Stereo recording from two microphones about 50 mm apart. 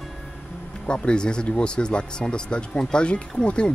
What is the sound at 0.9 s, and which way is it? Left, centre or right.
Speech, centre.